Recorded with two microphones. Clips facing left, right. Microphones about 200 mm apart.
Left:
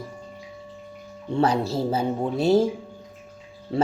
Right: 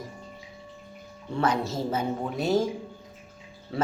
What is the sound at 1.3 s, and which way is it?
Speech, 30° left (ahead or behind).